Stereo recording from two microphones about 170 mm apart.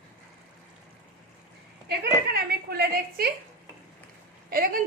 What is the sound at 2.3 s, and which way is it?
Speech, 65° right (ahead or behind).